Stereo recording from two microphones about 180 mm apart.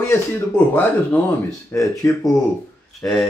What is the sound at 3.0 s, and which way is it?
Speech, centre (ahead or behind).